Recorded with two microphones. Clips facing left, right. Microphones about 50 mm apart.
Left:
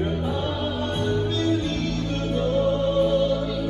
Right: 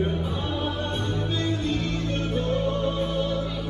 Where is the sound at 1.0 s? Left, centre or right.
Centre.